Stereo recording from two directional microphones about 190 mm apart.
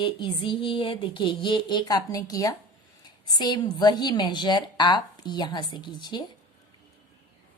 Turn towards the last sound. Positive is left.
turn(degrees=25)  # may be behind; listen again after turning